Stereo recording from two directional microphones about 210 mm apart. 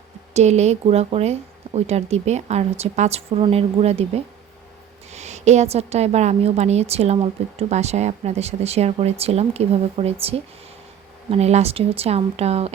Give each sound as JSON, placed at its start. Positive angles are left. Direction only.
{"t": 0.3, "sound": "speech", "side_deg": -30}